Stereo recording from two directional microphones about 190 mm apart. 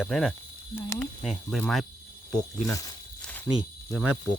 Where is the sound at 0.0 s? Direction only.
Centre (ahead or behind).